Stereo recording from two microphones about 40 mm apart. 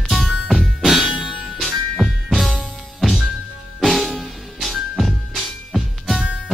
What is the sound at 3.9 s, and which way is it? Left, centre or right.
Music, centre.